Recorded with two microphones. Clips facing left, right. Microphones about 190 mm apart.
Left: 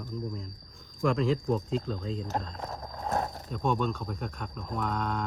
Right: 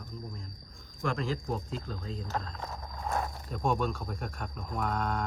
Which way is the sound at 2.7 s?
35° left (ahead or behind).